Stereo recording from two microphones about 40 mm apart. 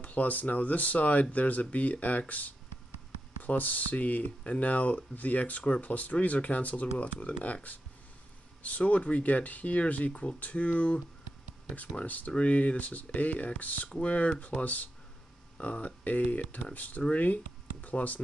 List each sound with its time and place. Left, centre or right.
0.0 s speech: left
8.6 s speech: left
12.3 s speech: left
15.5 s speech: left